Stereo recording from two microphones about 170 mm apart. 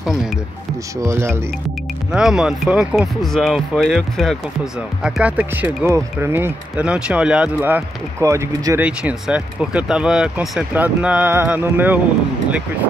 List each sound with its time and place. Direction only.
1.0 s speech: 15° right (ahead or behind)
2.1 s speech: 5° right (ahead or behind)